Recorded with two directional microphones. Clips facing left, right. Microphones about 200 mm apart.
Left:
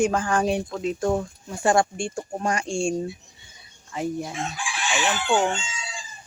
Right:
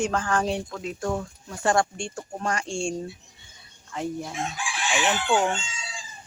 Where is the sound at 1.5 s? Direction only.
10° left (ahead or behind).